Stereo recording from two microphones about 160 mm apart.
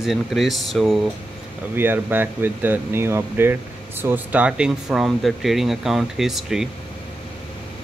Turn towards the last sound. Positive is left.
turn(degrees=0)  # may be behind; listen again after turning